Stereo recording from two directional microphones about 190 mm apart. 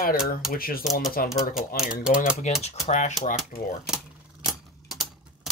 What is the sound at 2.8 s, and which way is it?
Speech, 40° left (ahead or behind).